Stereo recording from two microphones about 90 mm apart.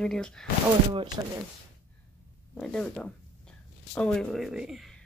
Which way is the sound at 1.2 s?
50° right (ahead or behind).